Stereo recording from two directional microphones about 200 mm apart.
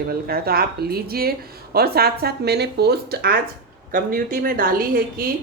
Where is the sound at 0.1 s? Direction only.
50° right (ahead or behind).